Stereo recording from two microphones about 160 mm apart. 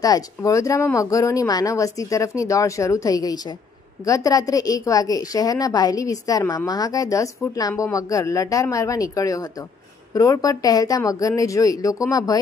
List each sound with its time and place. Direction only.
0.0 s speech: 20° left (ahead or behind)